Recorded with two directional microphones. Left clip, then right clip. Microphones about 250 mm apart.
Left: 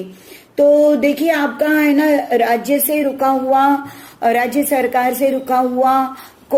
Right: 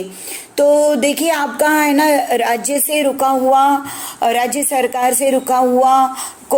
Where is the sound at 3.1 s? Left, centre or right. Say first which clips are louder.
Right 2 dB; right.